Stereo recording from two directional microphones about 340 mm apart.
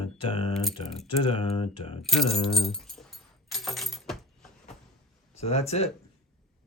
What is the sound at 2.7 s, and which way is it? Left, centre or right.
Dog, centre.